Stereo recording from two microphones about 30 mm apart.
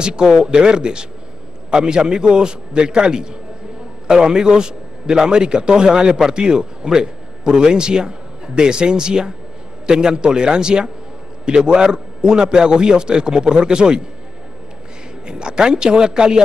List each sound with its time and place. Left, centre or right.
0.0 s a man's voice: right
15.2 s a man's voice: right